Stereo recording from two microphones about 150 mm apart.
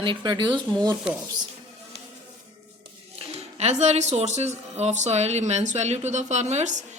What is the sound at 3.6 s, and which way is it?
A woman's voice, 50° right (ahead or behind).